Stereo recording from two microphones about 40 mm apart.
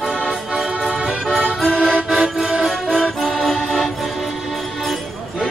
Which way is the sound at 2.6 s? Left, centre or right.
Centre.